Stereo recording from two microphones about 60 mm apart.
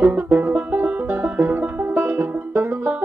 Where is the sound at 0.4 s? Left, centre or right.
Right.